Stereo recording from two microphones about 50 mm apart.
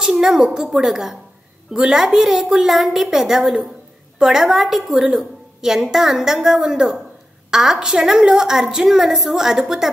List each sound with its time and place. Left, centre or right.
0.0 s a woman's voice: centre